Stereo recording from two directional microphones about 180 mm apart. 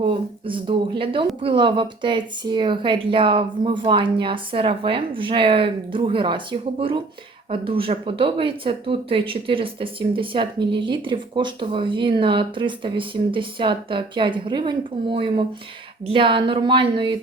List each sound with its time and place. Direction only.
0.0 s speech: 30° right (ahead or behind)